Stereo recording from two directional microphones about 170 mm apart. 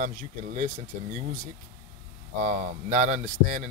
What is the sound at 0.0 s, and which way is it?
Speech, 45° right (ahead or behind).